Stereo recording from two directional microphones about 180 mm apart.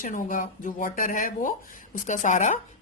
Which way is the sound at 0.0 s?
50° left (ahead or behind).